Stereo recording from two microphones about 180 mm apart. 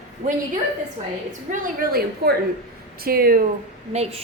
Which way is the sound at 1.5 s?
55° right (ahead or behind).